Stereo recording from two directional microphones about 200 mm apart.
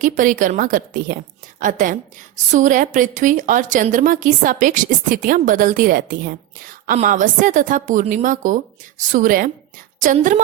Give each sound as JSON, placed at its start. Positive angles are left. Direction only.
{"t": 0.0, "sound": "a woman's voice", "side_deg": -40}